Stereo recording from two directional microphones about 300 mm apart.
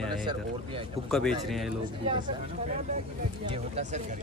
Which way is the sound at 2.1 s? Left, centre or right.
Centre.